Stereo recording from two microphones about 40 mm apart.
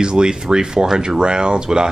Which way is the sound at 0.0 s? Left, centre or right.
Centre.